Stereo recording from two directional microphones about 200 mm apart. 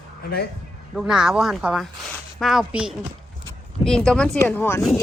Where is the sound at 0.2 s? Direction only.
50° left (ahead or behind).